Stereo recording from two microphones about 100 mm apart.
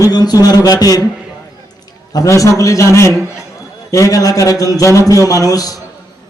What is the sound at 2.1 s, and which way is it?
A man's voice, 35° left (ahead or behind).